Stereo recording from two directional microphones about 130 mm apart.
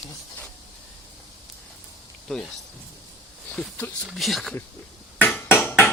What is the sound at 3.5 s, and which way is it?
Speech, 5° left (ahead or behind).